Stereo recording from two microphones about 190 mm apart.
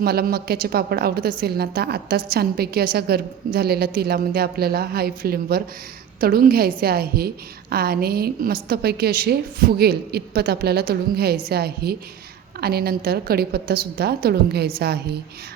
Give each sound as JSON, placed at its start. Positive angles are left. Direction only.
{"t": 0.0, "sound": "a woman's voice", "side_deg": -55}